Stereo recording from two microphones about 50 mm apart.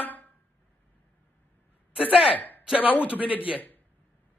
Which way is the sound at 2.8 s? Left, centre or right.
Left.